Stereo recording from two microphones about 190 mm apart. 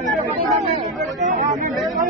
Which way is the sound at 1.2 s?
40° right (ahead or behind).